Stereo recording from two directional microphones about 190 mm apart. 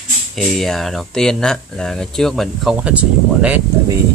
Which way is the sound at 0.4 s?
Centre (ahead or behind).